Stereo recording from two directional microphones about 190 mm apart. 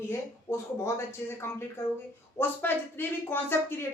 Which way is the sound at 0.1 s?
15° left (ahead or behind).